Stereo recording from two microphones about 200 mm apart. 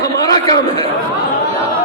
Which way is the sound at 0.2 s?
20° left (ahead or behind).